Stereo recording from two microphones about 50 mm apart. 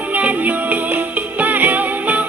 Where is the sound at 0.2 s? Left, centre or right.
Right.